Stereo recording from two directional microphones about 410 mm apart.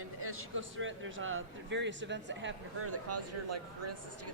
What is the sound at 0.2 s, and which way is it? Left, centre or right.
A man's voice, right.